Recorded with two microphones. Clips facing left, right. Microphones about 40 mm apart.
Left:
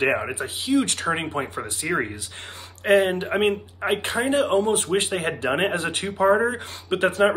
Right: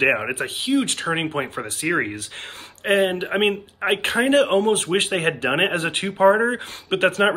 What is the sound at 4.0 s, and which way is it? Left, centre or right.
Speech, right.